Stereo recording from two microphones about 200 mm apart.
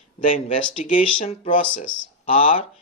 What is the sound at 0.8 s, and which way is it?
Speech, 35° left (ahead or behind).